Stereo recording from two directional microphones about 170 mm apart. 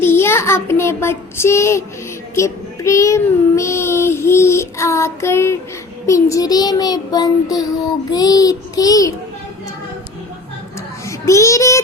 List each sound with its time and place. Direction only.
0.0 s child singing: 15° left (ahead or behind)
11.0 s a child's voice: 20° left (ahead or behind)